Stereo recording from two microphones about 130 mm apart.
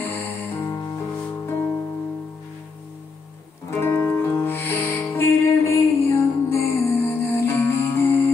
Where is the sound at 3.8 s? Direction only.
15° left (ahead or behind).